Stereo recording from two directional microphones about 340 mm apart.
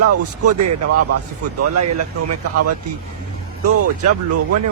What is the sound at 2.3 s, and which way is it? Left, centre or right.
Speech, right.